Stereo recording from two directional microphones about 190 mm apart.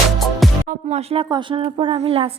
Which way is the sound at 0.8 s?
30° right (ahead or behind).